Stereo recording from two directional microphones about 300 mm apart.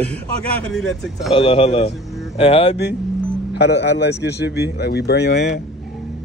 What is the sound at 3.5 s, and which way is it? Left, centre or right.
A man's voice, left.